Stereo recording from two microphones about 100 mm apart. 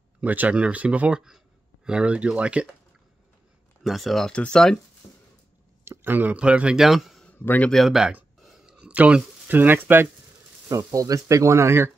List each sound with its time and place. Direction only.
0.2 s speech: 15° right (ahead or behind)
3.8 s speech: centre (ahead or behind)
5.9 s speech: 20° right (ahead or behind); by 7.2 s centre (ahead or behind)
7.2 s a sound: 15° left (ahead or behind)
7.7 s speech: centre (ahead or behind)
8.4 s a sound: 5° right (ahead or behind); by 10.0 s 20° right (ahead or behind)
10.7 s speech: 35° right (ahead or behind)